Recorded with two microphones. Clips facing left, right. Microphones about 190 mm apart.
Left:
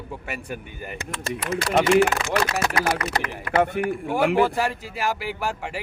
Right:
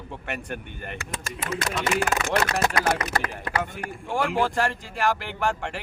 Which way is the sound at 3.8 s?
65° left (ahead or behind).